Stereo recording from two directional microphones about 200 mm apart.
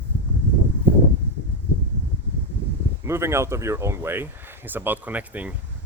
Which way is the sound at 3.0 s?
15° right (ahead or behind).